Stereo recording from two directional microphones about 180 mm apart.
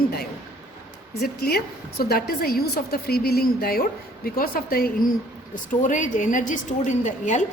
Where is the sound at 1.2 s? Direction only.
60° left (ahead or behind).